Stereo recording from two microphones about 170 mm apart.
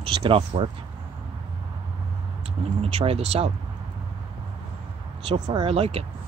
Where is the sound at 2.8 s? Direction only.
35° right (ahead or behind).